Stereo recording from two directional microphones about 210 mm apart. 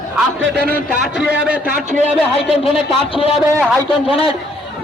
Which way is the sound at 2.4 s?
25° left (ahead or behind).